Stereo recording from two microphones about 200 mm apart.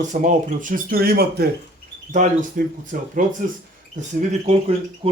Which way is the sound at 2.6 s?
45° right (ahead or behind).